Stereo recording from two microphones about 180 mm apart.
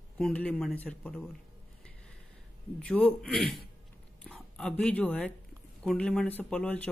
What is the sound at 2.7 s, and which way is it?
A man's voice, 10° left (ahead or behind).